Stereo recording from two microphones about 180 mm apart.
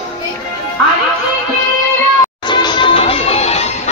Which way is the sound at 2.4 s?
25° left (ahead or behind).